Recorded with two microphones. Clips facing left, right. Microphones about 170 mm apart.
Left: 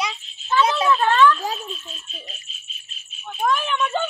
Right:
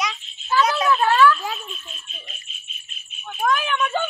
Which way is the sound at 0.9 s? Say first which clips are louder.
Right 1 dB; 5° right (ahead or behind).